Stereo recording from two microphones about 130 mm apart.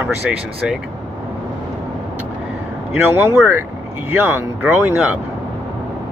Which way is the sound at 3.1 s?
15° right (ahead or behind).